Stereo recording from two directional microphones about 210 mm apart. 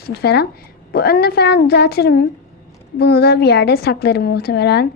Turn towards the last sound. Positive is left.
turn(degrees=50)  # may be behind; listen again after turning